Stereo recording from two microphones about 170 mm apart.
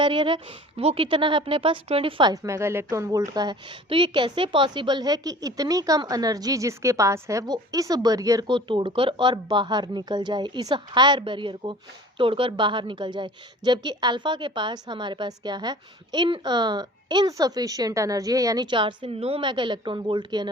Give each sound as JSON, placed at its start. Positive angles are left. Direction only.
{"t": 0.0, "sound": "a woman's voice", "side_deg": -30}